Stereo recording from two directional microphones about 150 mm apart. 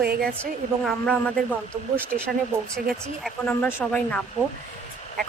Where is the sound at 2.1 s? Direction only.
70° right (ahead or behind).